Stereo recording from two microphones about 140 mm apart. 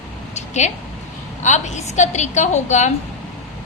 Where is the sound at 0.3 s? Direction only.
55° left (ahead or behind).